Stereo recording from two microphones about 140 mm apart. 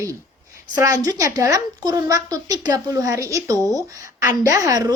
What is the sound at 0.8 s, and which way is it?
A woman's voice, 25° right (ahead or behind).